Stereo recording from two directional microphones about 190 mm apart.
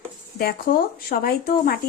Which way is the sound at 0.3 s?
50° left (ahead or behind).